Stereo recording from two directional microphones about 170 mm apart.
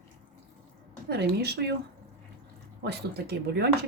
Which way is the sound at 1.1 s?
70° right (ahead or behind).